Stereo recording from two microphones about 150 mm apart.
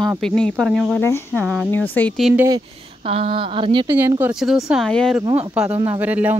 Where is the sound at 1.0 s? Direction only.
15° left (ahead or behind).